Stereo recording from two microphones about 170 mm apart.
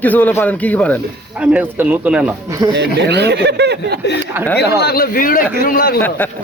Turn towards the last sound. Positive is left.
turn(degrees=60)  # may be behind; listen again after turning